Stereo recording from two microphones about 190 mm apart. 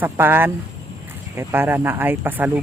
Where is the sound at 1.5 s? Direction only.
10° right (ahead or behind).